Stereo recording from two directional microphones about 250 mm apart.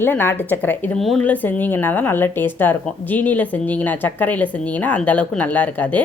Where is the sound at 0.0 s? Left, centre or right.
Centre.